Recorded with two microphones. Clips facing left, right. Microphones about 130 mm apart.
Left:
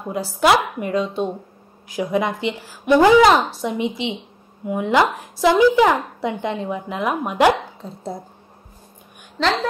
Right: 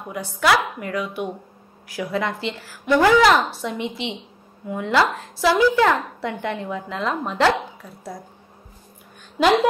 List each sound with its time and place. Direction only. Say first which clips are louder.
0.0 s a woman's voice: left 4 dB; 25° left (ahead or behind)
7.8 s speech: left 5 dB; 25° left (ahead or behind)
9.4 s a woman's voice: right 4 dB; 10° right (ahead or behind)